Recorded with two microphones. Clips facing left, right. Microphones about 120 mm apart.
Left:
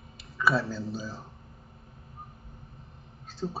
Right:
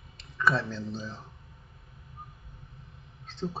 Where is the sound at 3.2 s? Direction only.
5° left (ahead or behind).